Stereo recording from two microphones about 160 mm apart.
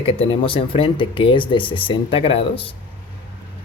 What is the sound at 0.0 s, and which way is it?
Speech, 35° left (ahead or behind).